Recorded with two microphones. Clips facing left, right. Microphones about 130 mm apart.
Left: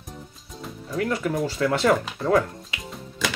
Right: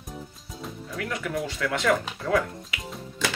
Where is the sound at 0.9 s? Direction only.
35° left (ahead or behind).